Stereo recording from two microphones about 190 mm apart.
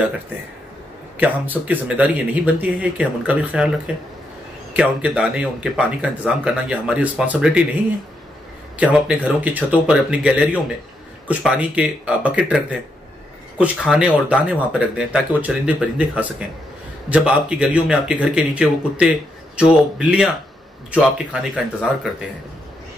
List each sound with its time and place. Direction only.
1.1 s speech: 10° right (ahead or behind)
8.7 s speech: 5° right (ahead or behind)